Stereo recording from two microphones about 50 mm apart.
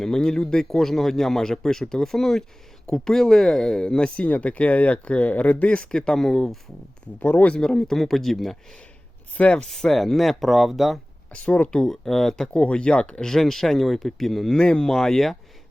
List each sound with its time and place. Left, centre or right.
0.0 s speech: centre
7.2 s speech: left
7.6 s speech: centre
9.4 s speech: left
9.6 s speech: centre
11.3 s speech: left
11.7 s speech: centre
12.5 s speech: left; by 14.5 s centre
14.5 s speech: centre
14.9 s speech: centre